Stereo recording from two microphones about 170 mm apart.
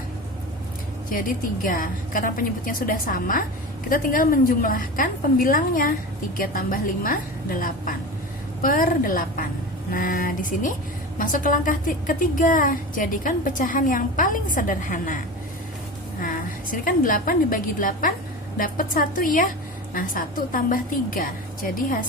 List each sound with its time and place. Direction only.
1.6 s a woman's voice: 55° left (ahead or behind)
16.8 s a woman's voice: 55° left (ahead or behind)